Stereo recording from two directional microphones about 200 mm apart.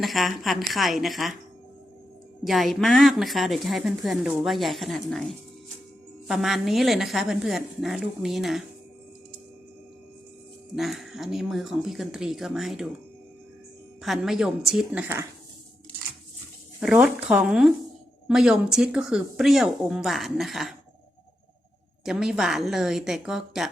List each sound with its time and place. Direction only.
0.0 s speech: centre (ahead or behind)
2.4 s speech: centre (ahead or behind)
6.2 s speech: centre (ahead or behind)
10.8 s speech: centre (ahead or behind)
14.0 s speech: centre (ahead or behind)
16.8 s speech: 5° right (ahead or behind)
22.0 s speech: 5° right (ahead or behind)